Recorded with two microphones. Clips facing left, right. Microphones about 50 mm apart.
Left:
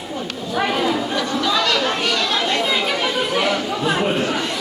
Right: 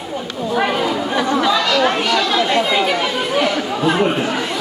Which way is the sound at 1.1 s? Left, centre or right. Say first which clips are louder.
Right 5 dB; right.